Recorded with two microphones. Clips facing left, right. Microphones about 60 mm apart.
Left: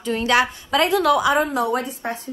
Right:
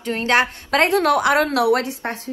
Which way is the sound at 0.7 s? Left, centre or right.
Right.